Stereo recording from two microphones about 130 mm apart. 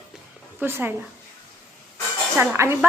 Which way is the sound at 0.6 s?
15° right (ahead or behind).